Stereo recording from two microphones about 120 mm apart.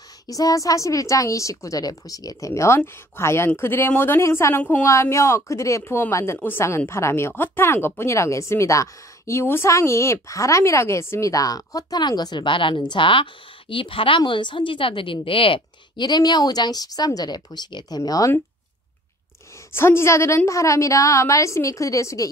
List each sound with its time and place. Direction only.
0.3 s a woman's voice: 30° left (ahead or behind)
19.7 s a woman's voice: 20° left (ahead or behind)